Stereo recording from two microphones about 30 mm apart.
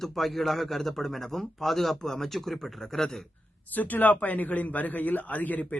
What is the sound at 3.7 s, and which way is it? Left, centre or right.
A man's voice, left.